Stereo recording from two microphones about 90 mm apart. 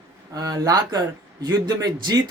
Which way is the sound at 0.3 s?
45° right (ahead or behind).